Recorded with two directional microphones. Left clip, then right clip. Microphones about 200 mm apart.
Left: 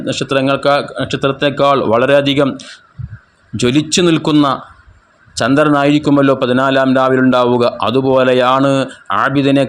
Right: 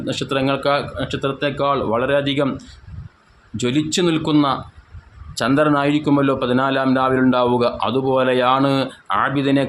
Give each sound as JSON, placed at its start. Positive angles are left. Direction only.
{"t": 0.0, "sound": "a man's voice", "side_deg": 25}
{"t": 3.6, "sound": "a man's voice", "side_deg": 25}